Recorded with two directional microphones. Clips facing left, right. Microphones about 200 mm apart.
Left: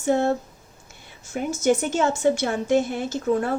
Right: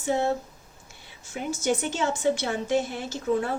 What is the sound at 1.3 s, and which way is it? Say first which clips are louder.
Speech: left 5 dB; 45° left (ahead or behind).